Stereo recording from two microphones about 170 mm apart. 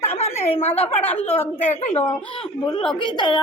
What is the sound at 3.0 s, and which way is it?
Speech, 25° left (ahead or behind).